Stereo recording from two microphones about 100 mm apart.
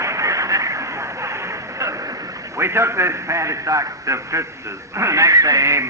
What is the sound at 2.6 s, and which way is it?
A man's voice, 25° right (ahead or behind).